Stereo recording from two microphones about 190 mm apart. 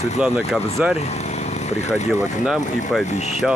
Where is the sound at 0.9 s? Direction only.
35° left (ahead or behind).